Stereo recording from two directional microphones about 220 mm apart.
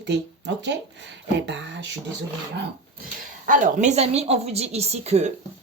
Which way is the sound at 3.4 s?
35° right (ahead or behind).